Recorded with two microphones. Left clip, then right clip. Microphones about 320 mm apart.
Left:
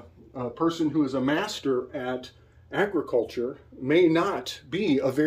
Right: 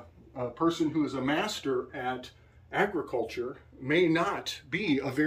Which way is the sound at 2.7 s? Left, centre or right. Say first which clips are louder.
Left 4 dB; left.